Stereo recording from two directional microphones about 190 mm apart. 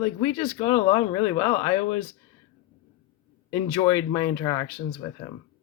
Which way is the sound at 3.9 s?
25° left (ahead or behind).